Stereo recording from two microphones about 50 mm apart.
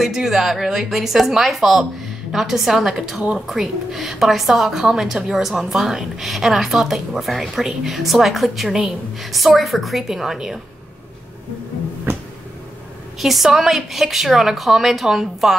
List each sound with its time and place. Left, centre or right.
0.0 s a woman's voice: centre
8.6 s a woman's voice: centre
9.2 s a woman's voice: centre
12.1 s a sound: right
13.2 s a woman's voice: centre